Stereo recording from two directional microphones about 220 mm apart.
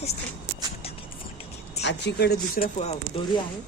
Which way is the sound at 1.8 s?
50° left (ahead or behind).